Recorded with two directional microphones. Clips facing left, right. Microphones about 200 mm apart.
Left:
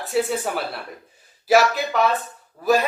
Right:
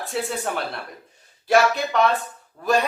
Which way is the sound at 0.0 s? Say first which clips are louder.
Left 4 dB; centre (ahead or behind).